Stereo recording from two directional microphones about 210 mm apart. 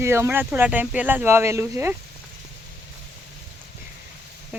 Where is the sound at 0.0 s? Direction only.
10° right (ahead or behind).